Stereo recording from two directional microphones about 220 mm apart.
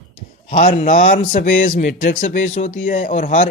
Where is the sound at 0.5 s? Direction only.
35° left (ahead or behind).